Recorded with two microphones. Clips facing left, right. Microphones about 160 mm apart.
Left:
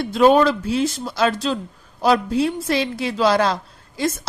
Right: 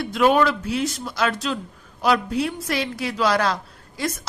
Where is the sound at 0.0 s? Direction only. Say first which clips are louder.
Left 4 dB; 30° left (ahead or behind).